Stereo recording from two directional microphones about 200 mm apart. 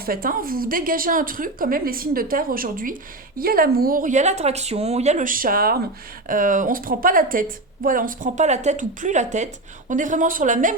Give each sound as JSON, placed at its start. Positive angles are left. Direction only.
{"t": 0.0, "sound": "a woman's voice", "side_deg": -45}